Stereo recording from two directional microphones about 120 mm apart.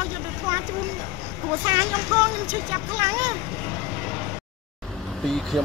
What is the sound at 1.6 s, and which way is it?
Speech, 25° right (ahead or behind).